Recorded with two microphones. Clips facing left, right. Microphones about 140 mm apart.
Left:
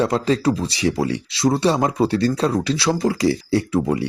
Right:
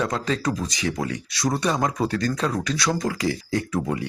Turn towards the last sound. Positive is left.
turn(degrees=35)  # may be behind; listen again after turning